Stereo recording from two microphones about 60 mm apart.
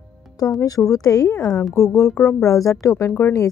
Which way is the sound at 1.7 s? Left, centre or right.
Left.